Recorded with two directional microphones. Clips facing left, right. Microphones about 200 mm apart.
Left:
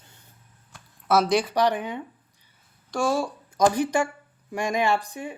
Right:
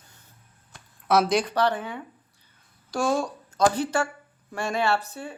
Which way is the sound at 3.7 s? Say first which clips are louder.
Left 2 dB; 15° left (ahead or behind).